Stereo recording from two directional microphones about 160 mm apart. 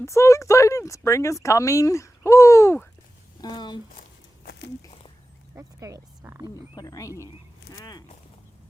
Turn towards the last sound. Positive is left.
turn(degrees=25)  # may be behind; listen again after turning